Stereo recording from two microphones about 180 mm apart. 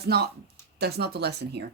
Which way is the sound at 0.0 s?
65° right (ahead or behind).